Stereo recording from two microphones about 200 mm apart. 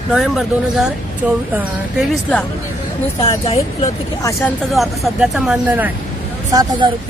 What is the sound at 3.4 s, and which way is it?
Speech, 30° left (ahead or behind).